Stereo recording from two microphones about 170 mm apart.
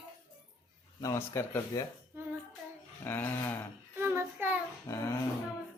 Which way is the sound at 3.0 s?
10° left (ahead or behind).